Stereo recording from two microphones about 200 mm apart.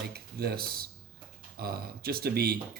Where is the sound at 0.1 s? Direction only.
50° right (ahead or behind).